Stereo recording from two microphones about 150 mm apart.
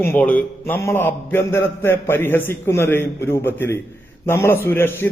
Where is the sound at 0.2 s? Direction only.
10° left (ahead or behind).